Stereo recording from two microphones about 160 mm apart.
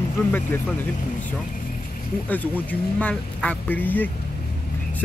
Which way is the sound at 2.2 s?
10° left (ahead or behind).